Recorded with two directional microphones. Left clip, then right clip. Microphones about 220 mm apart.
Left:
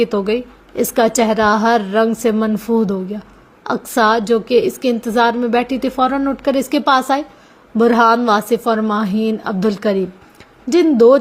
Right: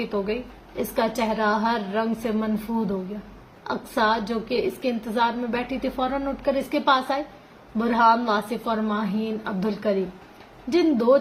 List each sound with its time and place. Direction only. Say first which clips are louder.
0.8 s a woman's voice: left 10 dB; 50° left (ahead or behind)